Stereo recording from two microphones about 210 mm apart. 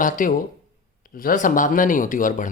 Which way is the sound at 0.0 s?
40° left (ahead or behind).